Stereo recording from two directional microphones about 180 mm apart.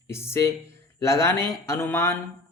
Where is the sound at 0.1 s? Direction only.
15° left (ahead or behind).